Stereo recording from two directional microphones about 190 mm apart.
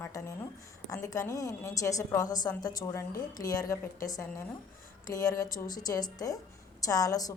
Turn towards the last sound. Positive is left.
turn(degrees=20)  # may be behind; listen again after turning